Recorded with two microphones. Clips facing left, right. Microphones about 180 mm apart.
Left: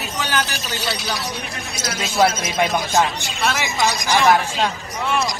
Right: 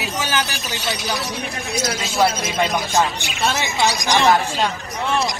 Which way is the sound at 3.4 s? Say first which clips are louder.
Right 1 dB; 30° right (ahead or behind).